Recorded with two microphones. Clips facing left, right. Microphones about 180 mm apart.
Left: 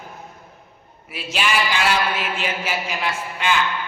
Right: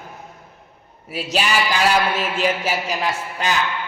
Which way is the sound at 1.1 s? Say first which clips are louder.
Right 2 dB; 40° right (ahead or behind).